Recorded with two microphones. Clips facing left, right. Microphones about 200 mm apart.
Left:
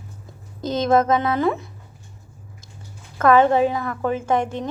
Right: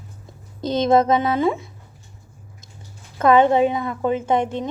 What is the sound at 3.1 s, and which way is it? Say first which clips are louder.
A woman's voice: right 1 dB; 20° right (ahead or behind).